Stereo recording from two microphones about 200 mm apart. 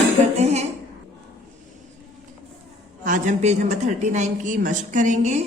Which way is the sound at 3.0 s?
40° right (ahead or behind).